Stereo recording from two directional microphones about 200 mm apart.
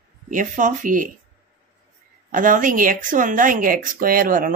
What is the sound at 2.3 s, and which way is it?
A woman's voice, 40° right (ahead or behind).